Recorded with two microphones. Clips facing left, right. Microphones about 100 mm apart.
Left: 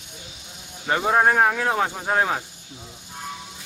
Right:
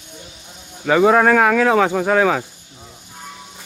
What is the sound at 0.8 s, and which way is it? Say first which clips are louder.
Speech: right 6 dB; 90° right.